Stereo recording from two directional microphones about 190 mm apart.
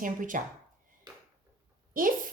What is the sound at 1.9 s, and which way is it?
Speech, 45° right (ahead or behind).